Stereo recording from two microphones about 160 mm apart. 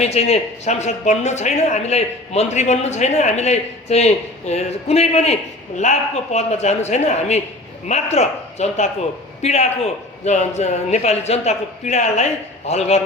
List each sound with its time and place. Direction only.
0.0 s speech: 40° left (ahead or behind)